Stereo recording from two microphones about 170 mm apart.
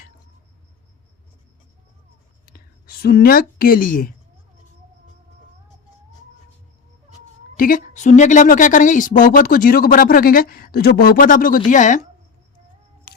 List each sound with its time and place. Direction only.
2.5 s speech: 65° left (ahead or behind)
7.5 s a woman's voice: 55° left (ahead or behind)